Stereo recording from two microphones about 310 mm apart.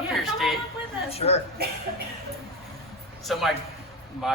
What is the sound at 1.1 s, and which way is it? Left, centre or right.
Speech, centre.